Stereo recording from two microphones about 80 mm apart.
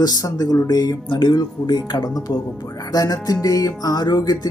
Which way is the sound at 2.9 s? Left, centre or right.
Left.